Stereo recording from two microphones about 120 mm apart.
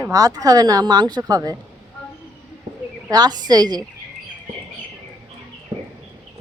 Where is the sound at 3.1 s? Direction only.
35° right (ahead or behind).